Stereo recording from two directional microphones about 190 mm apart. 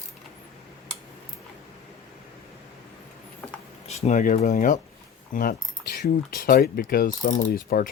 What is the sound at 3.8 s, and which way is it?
Speech, 35° left (ahead or behind).